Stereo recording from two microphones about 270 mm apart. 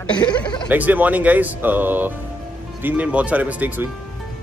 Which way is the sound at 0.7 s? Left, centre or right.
Centre.